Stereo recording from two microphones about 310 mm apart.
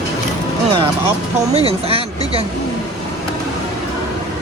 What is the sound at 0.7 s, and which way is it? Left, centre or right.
Speech, centre.